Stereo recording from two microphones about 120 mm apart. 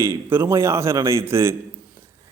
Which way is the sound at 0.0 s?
20° right (ahead or behind).